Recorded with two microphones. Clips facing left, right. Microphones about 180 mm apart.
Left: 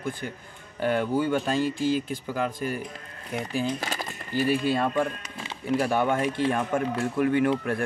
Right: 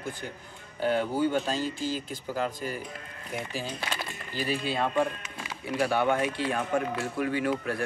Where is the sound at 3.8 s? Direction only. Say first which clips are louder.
Left 2 dB; 45° left (ahead or behind).